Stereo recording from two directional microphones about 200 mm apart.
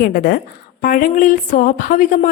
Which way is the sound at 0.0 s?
45° left (ahead or behind).